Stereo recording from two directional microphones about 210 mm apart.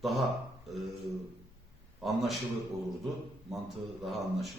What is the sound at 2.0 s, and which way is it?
Speech, centre (ahead or behind).